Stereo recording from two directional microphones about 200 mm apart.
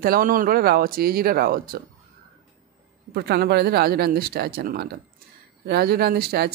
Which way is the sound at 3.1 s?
55° right (ahead or behind).